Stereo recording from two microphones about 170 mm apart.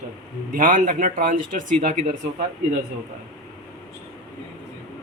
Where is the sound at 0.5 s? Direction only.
50° right (ahead or behind).